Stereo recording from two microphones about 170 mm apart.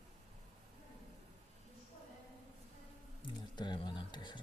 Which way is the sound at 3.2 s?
25° left (ahead or behind).